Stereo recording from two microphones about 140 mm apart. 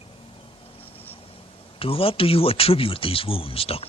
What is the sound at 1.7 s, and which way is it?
Speech, 40° left (ahead or behind).